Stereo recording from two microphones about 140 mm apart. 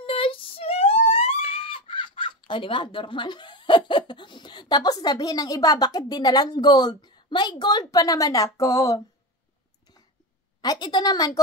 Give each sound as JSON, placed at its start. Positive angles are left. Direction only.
{"t": 0.0, "sound": "speech", "side_deg": 40}
{"t": 10.6, "sound": "a woman's voice", "side_deg": 30}